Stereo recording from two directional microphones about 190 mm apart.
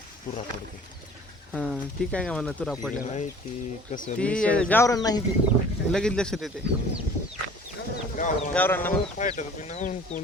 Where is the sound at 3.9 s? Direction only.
45° left (ahead or behind).